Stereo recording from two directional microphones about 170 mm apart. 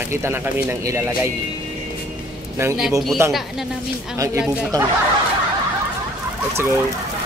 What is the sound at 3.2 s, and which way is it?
Speech, 15° right (ahead or behind).